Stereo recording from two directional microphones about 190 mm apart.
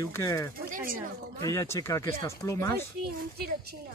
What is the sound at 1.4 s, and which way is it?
Speech, 15° left (ahead or behind).